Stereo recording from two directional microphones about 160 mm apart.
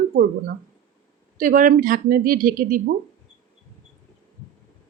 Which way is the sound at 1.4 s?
60° right (ahead or behind).